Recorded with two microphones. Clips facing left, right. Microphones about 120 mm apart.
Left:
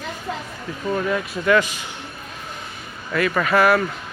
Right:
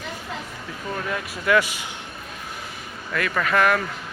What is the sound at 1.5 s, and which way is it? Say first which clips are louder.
Speech: left 2 dB; 10° right (ahead or behind).